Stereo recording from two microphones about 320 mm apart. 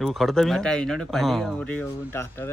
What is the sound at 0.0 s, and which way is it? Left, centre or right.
A man's voice, centre.